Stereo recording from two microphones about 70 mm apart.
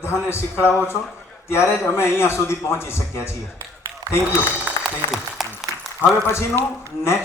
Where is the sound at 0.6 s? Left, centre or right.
Centre.